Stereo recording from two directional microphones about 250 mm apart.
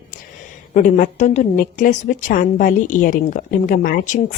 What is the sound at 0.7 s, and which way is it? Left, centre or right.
A woman's voice, left.